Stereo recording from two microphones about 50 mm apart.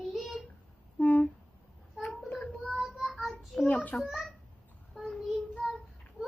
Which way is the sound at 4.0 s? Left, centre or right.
Centre.